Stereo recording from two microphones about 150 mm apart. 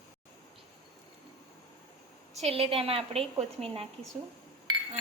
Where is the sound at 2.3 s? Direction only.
40° right (ahead or behind).